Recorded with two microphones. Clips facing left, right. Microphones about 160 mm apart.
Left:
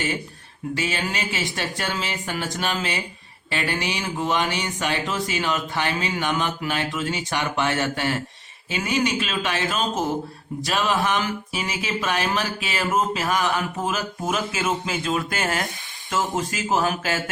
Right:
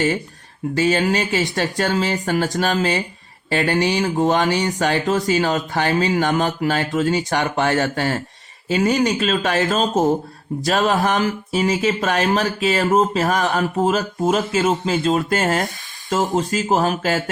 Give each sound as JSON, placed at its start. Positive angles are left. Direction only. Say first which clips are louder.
{"t": 0.8, "sound": "speech", "louder": "right 10 dB", "side_deg": -35}